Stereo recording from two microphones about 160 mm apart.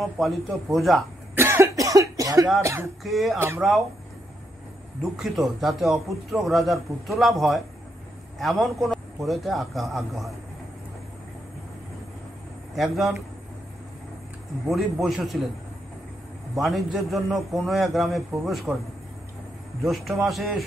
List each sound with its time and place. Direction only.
0.0 s speech: centre (ahead or behind)
1.3 s cough: 15° right (ahead or behind)
2.6 s speech: 15° right (ahead or behind)
3.0 s speech: centre (ahead or behind)
3.3 s speech: 15° right (ahead or behind)
5.1 s speech: centre (ahead or behind)
12.7 s speech: centre (ahead or behind)
14.7 s speech: centre (ahead or behind)
16.6 s speech: centre (ahead or behind)
19.8 s speech: centre (ahead or behind)